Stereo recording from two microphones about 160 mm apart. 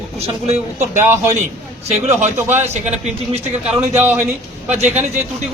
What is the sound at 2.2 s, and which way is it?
Speech, 45° right (ahead or behind).